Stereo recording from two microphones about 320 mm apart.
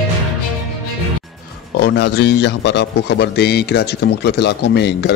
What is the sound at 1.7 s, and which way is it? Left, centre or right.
A man's voice, left.